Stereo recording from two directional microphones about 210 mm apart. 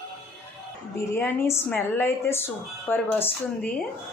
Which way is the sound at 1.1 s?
10° left (ahead or behind).